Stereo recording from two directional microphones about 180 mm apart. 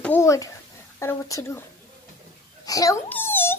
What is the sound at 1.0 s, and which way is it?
Speech, 15° left (ahead or behind).